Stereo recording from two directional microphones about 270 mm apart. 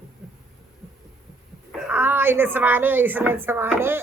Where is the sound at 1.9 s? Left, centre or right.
Centre.